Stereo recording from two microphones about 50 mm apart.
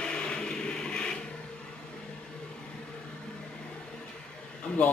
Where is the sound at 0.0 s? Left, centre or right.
Centre.